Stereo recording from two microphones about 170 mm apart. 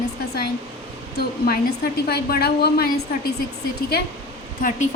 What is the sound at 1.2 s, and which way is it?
A woman's voice, 65° left (ahead or behind).